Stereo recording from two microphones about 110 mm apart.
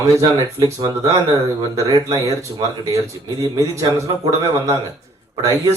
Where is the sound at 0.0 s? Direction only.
35° right (ahead or behind).